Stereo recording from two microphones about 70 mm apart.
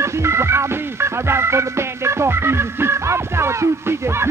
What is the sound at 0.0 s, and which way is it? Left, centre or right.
Music, right.